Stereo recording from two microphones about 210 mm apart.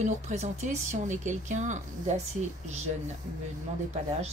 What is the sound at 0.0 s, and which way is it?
Speech, 35° right (ahead or behind).